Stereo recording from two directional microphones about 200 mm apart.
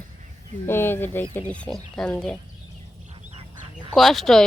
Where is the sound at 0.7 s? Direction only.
10° left (ahead or behind).